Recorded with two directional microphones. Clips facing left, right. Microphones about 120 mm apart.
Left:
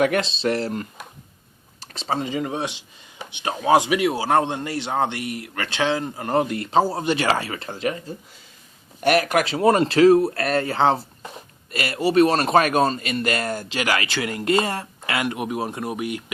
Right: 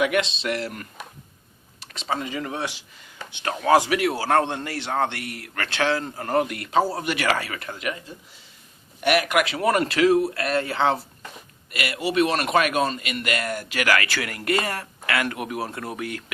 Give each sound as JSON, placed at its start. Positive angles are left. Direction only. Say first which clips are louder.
{"t": 0.0, "sound": "speech", "louder": "left 3 dB", "side_deg": 35}